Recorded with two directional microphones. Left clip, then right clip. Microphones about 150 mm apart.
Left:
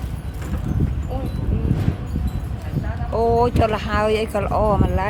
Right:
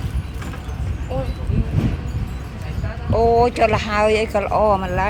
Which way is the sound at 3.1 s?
10° left (ahead or behind).